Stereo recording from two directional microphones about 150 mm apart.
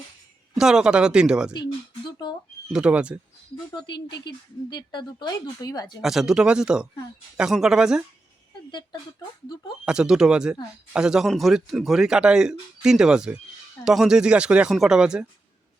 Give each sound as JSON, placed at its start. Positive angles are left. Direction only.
{"t": 0.5, "sound": "speech", "side_deg": -5}
{"t": 1.6, "sound": "a sound", "side_deg": 30}
{"t": 2.7, "sound": "speech", "side_deg": -5}
{"t": 3.8, "sound": "speech", "side_deg": 30}
{"t": 6.0, "sound": "speech", "side_deg": 0}
{"t": 9.8, "sound": "speech", "side_deg": -5}